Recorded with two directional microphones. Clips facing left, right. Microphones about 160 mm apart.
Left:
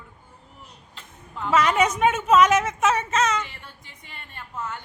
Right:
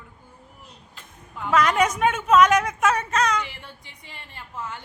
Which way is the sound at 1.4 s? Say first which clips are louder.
Even; 5° left (ahead or behind).